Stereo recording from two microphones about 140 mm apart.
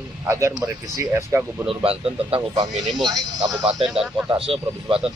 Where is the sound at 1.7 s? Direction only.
40° right (ahead or behind).